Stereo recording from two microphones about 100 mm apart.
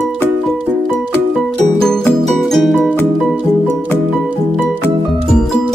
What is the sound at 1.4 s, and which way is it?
Music, 5° left (ahead or behind).